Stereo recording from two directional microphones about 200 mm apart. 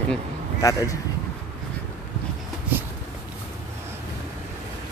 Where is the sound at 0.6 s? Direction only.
15° left (ahead or behind).